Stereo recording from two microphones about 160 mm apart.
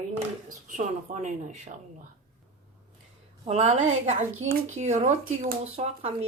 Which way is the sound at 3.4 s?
40° right (ahead or behind).